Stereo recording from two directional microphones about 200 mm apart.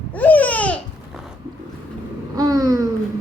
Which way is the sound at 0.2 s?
10° left (ahead or behind).